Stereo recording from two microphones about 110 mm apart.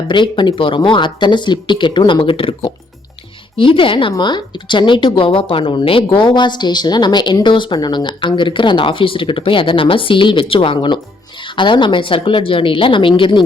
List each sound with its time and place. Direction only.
0.1 s speech: 45° left (ahead or behind)